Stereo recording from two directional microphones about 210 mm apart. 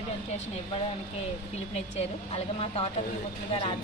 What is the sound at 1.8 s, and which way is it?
A woman's voice, 30° left (ahead or behind).